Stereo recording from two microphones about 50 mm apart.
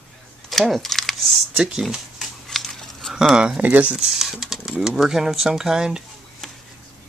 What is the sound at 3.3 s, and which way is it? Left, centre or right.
Speech, centre.